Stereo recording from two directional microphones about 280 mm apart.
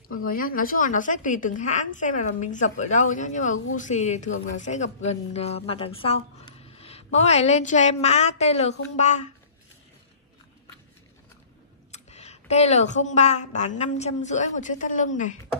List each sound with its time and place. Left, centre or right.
0.2 s speech: left
11.9 s a sound: left
12.9 s speech: left